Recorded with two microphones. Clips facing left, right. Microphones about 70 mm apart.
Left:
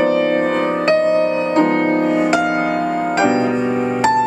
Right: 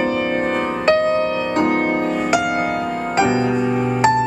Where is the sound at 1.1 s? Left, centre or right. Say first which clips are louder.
Left 3 dB; centre.